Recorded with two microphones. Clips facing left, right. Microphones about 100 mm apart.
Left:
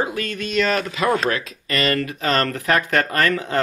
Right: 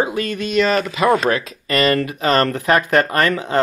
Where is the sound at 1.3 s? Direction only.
25° right (ahead or behind).